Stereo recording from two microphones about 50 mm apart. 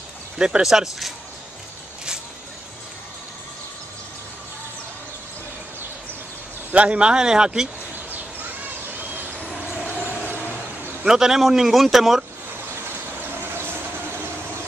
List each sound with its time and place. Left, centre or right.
0.4 s speech: centre
6.7 s speech: right
9.8 s vehicle: left
11.1 s speech: centre